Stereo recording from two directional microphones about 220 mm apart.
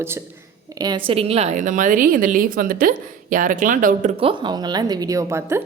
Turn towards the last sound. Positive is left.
turn(degrees=-10)  # may be behind; listen again after turning